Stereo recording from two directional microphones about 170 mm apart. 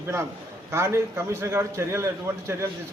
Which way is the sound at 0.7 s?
15° right (ahead or behind).